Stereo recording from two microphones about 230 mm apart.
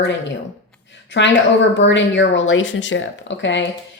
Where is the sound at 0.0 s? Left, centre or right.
Left.